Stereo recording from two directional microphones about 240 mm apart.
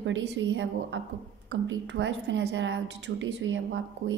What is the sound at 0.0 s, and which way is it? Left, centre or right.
A woman's voice, right.